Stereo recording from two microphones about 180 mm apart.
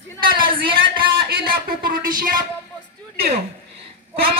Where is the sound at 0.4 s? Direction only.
30° right (ahead or behind).